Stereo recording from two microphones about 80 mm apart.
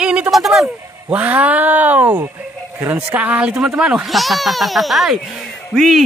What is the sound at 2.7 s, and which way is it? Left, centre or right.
Speech, right.